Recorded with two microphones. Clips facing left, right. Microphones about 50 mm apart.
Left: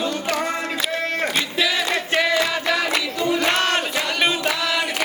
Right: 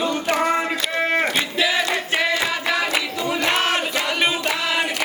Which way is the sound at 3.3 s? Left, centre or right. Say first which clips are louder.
Right 1 dB; centre.